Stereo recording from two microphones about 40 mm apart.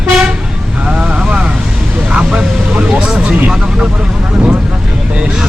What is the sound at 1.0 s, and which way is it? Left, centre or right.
Vehicle, right.